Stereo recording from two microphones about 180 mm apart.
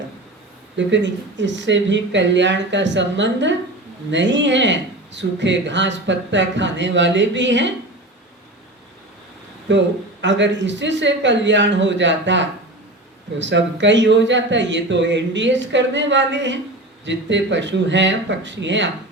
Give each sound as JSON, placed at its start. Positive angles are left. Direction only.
{"t": 0.8, "sound": "speech", "side_deg": -85}
{"t": 9.6, "sound": "speech", "side_deg": -85}